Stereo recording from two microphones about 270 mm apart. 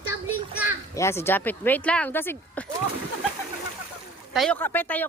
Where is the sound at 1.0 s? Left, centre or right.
Centre.